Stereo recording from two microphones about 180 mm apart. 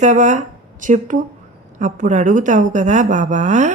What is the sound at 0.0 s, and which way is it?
A woman's voice, 40° right (ahead or behind).